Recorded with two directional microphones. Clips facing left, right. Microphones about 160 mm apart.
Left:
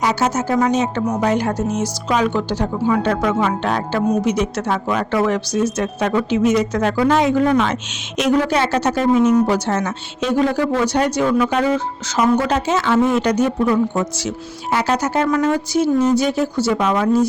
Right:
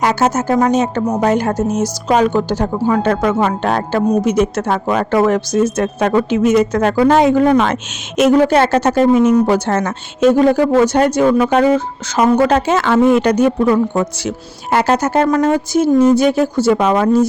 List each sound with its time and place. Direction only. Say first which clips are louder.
0.0 s speech: right 4 dB; 50° right (ahead or behind)